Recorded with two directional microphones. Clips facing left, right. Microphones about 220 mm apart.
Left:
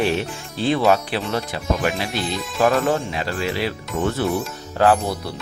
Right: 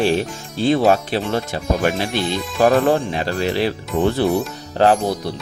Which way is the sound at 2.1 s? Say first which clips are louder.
Right 4 dB; centre (ahead or behind).